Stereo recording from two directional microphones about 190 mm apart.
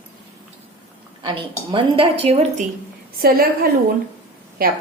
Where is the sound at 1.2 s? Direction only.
25° right (ahead or behind).